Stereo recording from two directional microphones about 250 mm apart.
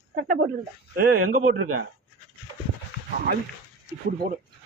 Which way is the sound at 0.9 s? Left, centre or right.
Right.